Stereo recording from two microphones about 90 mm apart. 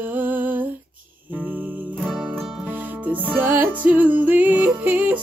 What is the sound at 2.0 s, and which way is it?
Music, centre (ahead or behind).